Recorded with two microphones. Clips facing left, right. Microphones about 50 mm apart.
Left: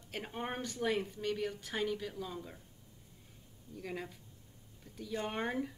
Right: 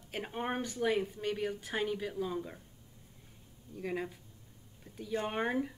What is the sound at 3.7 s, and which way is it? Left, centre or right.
Speech, centre.